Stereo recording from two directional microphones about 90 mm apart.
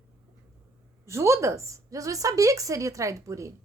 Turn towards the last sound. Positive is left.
turn(degrees=-35)  # may be behind; listen again after turning